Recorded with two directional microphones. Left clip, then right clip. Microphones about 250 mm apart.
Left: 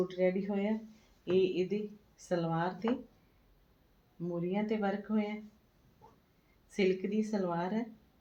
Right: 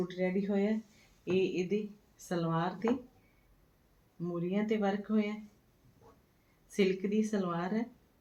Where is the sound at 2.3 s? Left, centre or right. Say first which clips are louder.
Left 1 dB; right.